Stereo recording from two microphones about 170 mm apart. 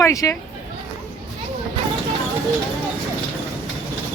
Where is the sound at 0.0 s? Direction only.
15° left (ahead or behind).